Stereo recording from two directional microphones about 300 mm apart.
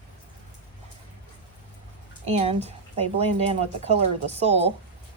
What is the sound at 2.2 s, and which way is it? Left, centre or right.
Speech, right.